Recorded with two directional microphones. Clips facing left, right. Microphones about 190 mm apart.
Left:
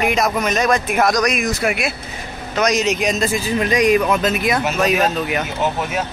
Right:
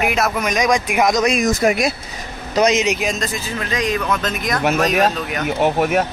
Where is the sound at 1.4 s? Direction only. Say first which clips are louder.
Right 4 dB; 40° right (ahead or behind).